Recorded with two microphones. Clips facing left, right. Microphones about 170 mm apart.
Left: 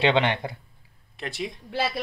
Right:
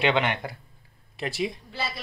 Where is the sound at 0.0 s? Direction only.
30° left (ahead or behind).